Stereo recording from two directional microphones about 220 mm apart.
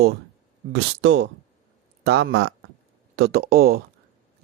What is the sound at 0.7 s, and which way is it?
Speech, 50° right (ahead or behind).